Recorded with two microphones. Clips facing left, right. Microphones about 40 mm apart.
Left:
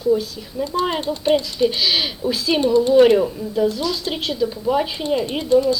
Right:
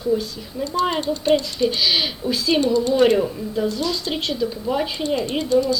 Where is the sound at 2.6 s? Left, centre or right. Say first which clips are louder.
Left 7 dB; centre.